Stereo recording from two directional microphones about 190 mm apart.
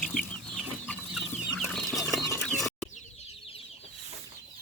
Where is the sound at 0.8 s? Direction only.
5° left (ahead or behind).